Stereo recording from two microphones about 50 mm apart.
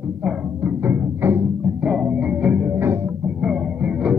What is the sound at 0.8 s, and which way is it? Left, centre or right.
Music, right.